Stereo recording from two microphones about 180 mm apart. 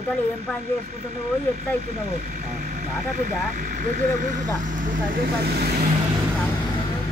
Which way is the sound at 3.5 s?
40° right (ahead or behind).